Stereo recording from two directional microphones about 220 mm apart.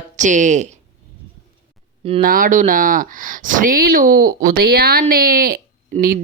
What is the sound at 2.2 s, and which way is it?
Speech, 40° right (ahead or behind).